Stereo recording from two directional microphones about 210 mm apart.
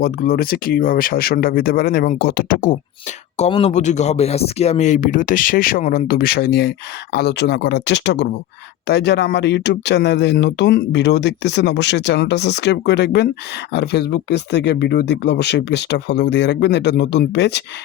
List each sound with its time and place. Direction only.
0.0 s speech: 45° left (ahead or behind)